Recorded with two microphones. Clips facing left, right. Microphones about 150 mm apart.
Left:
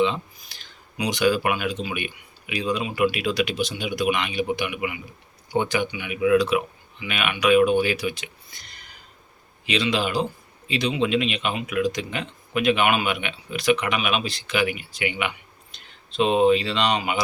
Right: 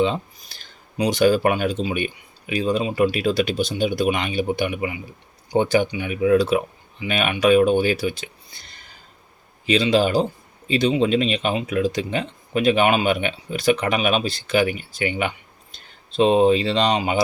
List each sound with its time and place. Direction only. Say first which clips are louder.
0.0 s speech: right 2 dB; 40° right (ahead or behind)
9.6 s speech: right 6 dB; 35° right (ahead or behind)